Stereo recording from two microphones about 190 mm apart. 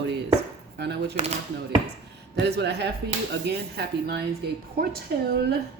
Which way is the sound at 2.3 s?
60° right (ahead or behind).